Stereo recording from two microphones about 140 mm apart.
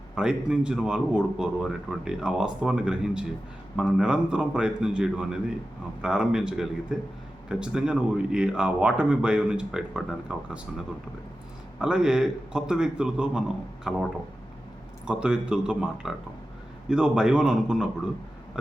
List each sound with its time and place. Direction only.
0.2 s a man's voice: 5° right (ahead or behind)
15.0 s a man's voice: 5° right (ahead or behind)
18.5 s a sound: 5° right (ahead or behind)